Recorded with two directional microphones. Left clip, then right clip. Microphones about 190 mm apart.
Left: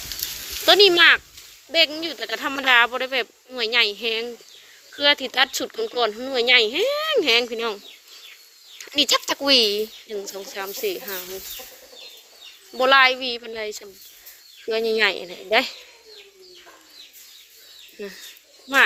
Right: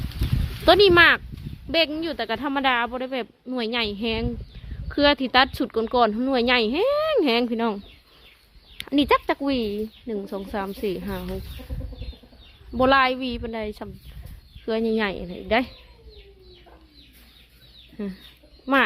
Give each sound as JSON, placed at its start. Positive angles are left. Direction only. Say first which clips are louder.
{"t": 0.6, "sound": "speech", "louder": "left 1 dB", "side_deg": -25}
{"t": 2.3, "sound": "speech", "louder": "left 5 dB", "side_deg": -10}
{"t": 8.9, "sound": "speech", "louder": "even", "side_deg": -10}
{"t": 10.1, "sound": "speech", "louder": "right 1 dB", "side_deg": -15}
{"t": 12.7, "sound": "speech", "louder": "left 3 dB", "side_deg": -20}